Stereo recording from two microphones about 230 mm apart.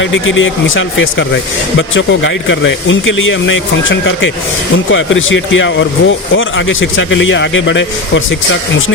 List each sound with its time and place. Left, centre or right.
0.0 s speech: left